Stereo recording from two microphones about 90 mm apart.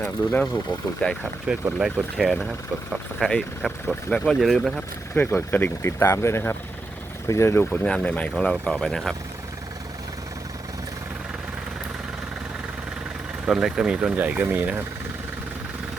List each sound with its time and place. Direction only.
0.0 s speech: 15° left (ahead or behind)
1.5 s speech: 15° right (ahead or behind); by 4.7 s centre (ahead or behind)
5.1 s speech: 25° left (ahead or behind)
7.7 s speech: 10° left (ahead or behind)
13.4 s speech: 5° right (ahead or behind)